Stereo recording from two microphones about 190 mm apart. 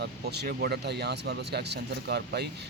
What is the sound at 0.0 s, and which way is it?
Speech, 60° right (ahead or behind).